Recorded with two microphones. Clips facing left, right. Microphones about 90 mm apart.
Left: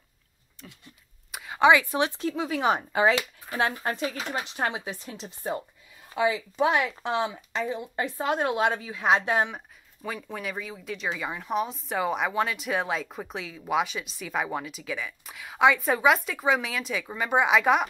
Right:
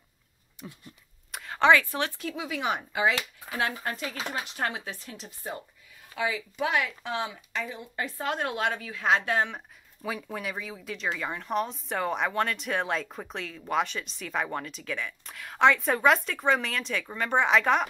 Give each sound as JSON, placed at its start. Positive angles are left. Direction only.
{"t": 0.6, "sound": "speech", "side_deg": -15}
{"t": 1.3, "sound": "speech", "side_deg": 5}
{"t": 2.2, "sound": "speech", "side_deg": 35}
{"t": 10.0, "sound": "speech", "side_deg": 0}